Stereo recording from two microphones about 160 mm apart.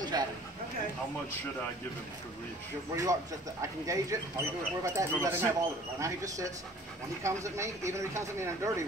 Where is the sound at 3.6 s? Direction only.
20° right (ahead or behind).